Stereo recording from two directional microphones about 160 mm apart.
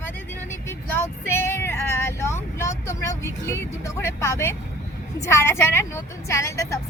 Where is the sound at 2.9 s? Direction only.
20° left (ahead or behind).